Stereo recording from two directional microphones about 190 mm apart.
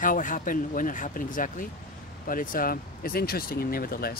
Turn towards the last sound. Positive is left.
turn(degrees=50)  # may be behind; listen again after turning